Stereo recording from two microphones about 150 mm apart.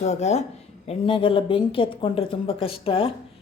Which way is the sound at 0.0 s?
50° left (ahead or behind).